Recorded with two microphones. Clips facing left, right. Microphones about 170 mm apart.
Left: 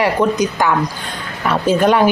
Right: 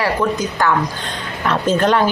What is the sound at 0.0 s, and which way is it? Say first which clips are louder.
Speech: left 3 dB; 20° left (ahead or behind).